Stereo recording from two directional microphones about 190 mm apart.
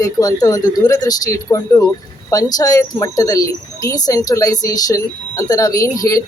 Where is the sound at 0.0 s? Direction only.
20° left (ahead or behind).